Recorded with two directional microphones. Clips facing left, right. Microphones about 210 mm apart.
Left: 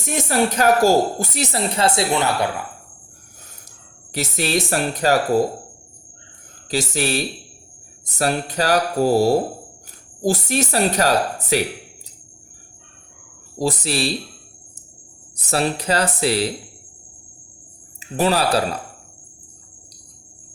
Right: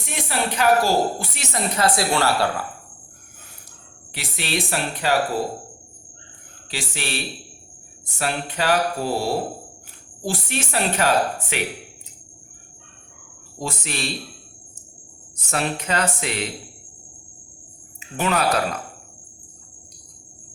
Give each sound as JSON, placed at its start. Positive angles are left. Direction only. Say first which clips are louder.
{"t": 0.0, "sound": "speech", "louder": "left 6 dB", "side_deg": 45}
{"t": 4.1, "sound": "speech", "louder": "left 6 dB", "side_deg": 40}
{"t": 6.7, "sound": "speech", "louder": "left 9 dB", "side_deg": 40}
{"t": 13.6, "sound": "speech", "louder": "left 7 dB", "side_deg": 35}
{"t": 15.4, "sound": "speech", "louder": "left 4 dB", "side_deg": 35}
{"t": 18.2, "sound": "speech", "louder": "left 3 dB", "side_deg": 35}